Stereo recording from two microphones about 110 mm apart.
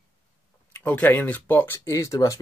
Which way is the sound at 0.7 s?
15° left (ahead or behind).